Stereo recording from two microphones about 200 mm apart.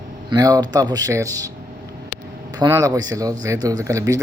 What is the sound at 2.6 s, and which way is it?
A man's voice, 20° right (ahead or behind).